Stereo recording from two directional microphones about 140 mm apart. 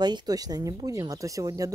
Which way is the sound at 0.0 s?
30° right (ahead or behind).